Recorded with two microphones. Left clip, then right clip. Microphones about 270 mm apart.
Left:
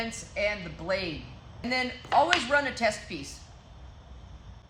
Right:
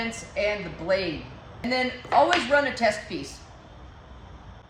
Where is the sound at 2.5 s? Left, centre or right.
Centre.